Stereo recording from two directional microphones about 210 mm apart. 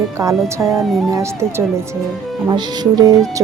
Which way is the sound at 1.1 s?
15° right (ahead or behind).